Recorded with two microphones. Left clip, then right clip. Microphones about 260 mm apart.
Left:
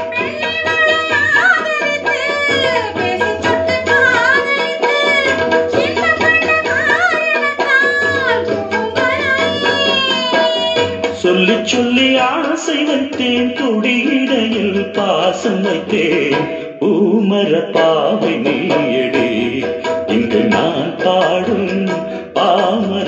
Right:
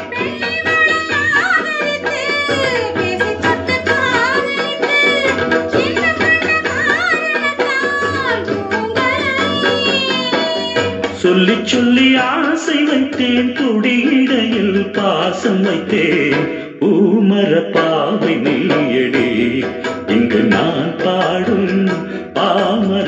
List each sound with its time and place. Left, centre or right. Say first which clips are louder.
11.2 s music: even; right
15.1 s music: left 1 dB; right
17.7 s music: left 2 dB; right